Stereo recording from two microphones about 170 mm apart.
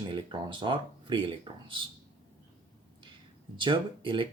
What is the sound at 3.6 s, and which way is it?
Speech, 30° right (ahead or behind).